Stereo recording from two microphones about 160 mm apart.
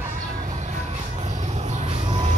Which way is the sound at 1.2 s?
45° right (ahead or behind).